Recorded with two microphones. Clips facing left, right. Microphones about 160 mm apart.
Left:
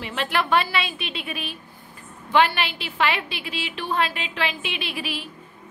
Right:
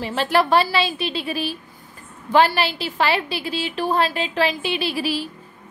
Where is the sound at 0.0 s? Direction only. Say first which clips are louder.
Right 6 dB; 35° right (ahead or behind).